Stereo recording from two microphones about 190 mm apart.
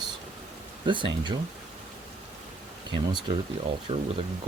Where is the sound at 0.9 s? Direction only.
25° right (ahead or behind).